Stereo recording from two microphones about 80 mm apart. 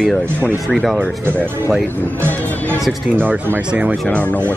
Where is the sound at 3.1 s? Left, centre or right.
Right.